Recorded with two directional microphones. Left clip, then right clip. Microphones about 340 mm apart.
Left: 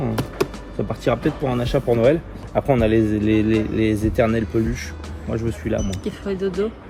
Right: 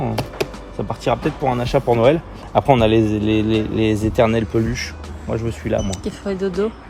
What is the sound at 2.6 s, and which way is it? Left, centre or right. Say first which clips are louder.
Speech: right 4 dB; right.